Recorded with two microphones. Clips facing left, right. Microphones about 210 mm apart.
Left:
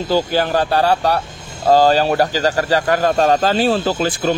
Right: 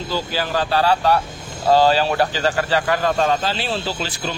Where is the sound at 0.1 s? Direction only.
50° left (ahead or behind).